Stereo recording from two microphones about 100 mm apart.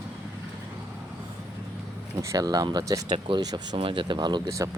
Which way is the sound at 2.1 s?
35° right (ahead or behind).